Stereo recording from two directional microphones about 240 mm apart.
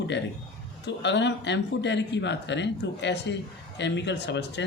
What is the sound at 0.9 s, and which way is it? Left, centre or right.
Speech, left.